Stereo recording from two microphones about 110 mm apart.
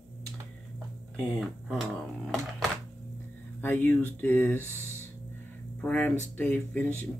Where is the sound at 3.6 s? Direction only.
20° left (ahead or behind).